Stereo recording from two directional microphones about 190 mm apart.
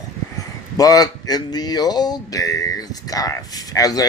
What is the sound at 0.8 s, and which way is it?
Speech, 20° left (ahead or behind).